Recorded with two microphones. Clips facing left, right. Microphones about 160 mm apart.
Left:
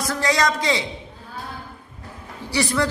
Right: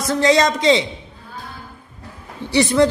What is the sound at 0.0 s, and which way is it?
Speech, 25° right (ahead or behind).